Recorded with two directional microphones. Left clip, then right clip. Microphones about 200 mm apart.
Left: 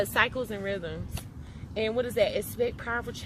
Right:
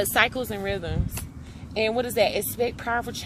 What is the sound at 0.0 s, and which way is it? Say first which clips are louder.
A woman's voice: right 4 dB; 35° right (ahead or behind).